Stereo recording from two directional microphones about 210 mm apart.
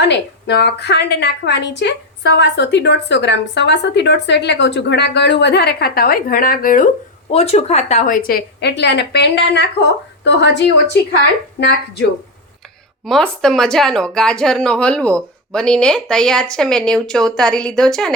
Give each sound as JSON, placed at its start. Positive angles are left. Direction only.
{"t": 0.0, "sound": "a woman's voice", "side_deg": 55}
{"t": 13.1, "sound": "speech", "side_deg": 0}